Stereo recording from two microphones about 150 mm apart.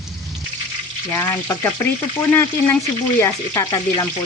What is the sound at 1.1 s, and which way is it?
Speech, 15° left (ahead or behind).